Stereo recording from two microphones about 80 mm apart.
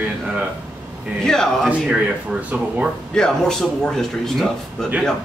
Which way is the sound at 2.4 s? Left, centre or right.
Centre.